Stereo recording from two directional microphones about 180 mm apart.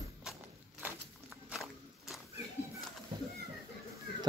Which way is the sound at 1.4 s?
Centre (ahead or behind).